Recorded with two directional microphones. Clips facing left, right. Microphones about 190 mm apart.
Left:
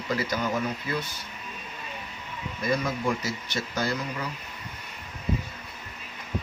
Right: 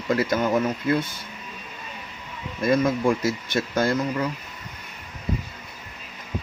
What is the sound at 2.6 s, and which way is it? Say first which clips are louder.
Speech: right 7 dB; 50° right (ahead or behind).